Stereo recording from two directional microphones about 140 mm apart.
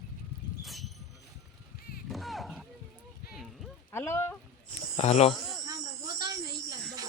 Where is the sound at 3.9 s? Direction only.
15° left (ahead or behind).